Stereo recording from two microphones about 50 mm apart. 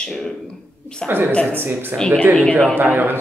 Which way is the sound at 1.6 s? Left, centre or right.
Right.